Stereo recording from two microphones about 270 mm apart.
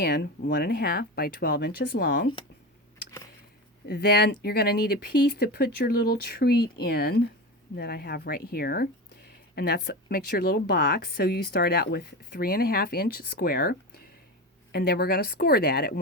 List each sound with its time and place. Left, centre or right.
0.0 s speech: left
3.8 s speech: left